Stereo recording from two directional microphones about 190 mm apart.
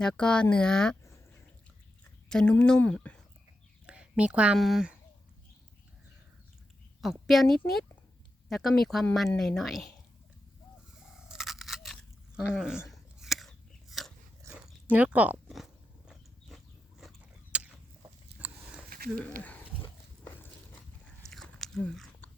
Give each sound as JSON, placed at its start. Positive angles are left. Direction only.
{"t": 0.0, "sound": "a woman's voice", "side_deg": 5}
{"t": 2.3, "sound": "a woman's voice", "side_deg": 5}
{"t": 3.8, "sound": "speech", "side_deg": -5}
{"t": 7.0, "sound": "a woman's voice", "side_deg": 0}
{"t": 11.3, "sound": "a sound", "side_deg": 0}
{"t": 12.5, "sound": "a woman's voice", "side_deg": -5}
{"t": 12.9, "sound": "a sound", "side_deg": 0}
{"t": 13.9, "sound": "biting", "side_deg": 0}
{"t": 18.3, "sound": "a sound", "side_deg": -10}
{"t": 18.9, "sound": "a sound", "side_deg": -50}
{"t": 19.4, "sound": "pig", "side_deg": 10}
{"t": 21.2, "sound": "biting", "side_deg": 0}